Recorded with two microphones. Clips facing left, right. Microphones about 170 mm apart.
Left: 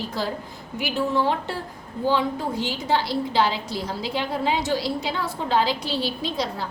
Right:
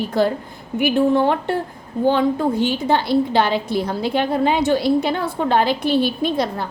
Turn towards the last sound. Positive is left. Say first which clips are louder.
# right 7 dB
turn(degrees=-55)  # may be behind; listen again after turning